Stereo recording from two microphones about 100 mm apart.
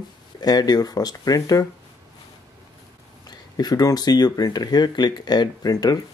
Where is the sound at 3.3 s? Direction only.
40° left (ahead or behind).